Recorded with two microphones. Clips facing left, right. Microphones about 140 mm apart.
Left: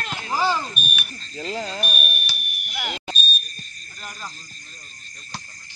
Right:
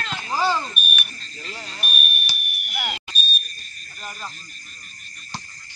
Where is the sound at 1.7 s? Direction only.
35° left (ahead or behind).